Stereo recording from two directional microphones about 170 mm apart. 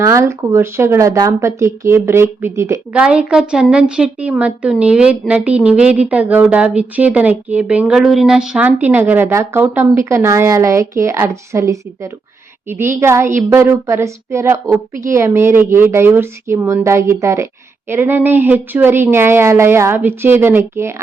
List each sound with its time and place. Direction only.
0.0 s a woman's voice: 15° right (ahead or behind)
3.0 s a woman's voice: 5° right (ahead or behind)